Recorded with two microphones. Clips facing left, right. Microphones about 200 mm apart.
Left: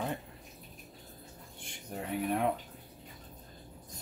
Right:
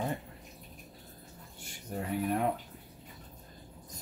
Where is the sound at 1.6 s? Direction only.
Centre (ahead or behind).